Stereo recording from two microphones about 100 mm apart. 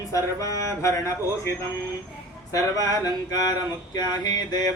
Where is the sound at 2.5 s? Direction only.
35° left (ahead or behind).